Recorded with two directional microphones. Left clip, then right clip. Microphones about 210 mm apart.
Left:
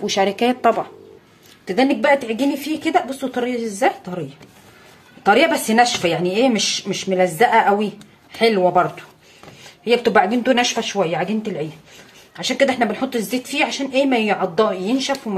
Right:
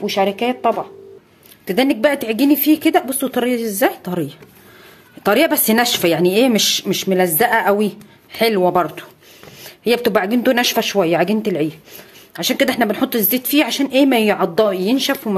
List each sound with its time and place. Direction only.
0.0 s speech: centre (ahead or behind)
1.7 s speech: 35° right (ahead or behind)
5.2 s speech: 45° right (ahead or behind)